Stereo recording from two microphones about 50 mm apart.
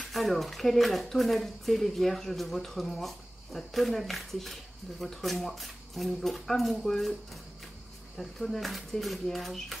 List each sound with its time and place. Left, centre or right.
0.1 s speech: centre
8.2 s speech: centre